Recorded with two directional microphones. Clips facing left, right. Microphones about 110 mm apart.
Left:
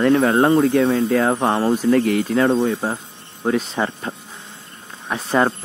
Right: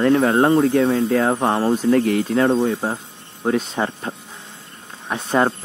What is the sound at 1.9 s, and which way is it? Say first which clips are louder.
Speech: even; 40° right (ahead or behind).